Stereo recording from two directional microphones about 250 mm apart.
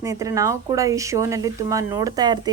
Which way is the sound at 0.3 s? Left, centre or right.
Centre.